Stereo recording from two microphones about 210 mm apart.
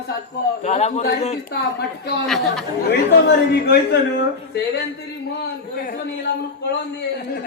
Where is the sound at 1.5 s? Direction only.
50° left (ahead or behind).